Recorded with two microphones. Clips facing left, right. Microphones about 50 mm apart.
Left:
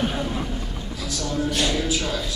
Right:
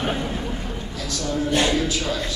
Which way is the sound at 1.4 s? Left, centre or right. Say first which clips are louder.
Right 5 dB; right.